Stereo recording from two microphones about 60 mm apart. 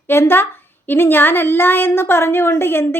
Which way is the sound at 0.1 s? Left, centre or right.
Left.